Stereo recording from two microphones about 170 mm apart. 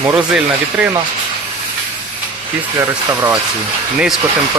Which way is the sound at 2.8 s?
20° right (ahead or behind).